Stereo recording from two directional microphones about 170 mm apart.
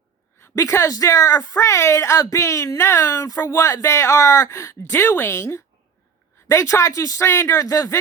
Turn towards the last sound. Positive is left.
turn(degrees=20)  # may be behind; listen again after turning